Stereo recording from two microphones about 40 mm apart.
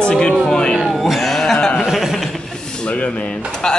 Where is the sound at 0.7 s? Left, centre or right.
Centre.